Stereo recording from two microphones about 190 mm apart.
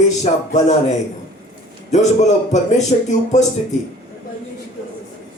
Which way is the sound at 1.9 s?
35° left (ahead or behind).